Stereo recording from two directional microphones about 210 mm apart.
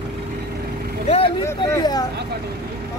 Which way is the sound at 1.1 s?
25° left (ahead or behind).